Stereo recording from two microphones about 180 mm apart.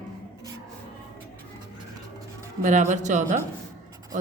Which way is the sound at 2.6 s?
40° right (ahead or behind).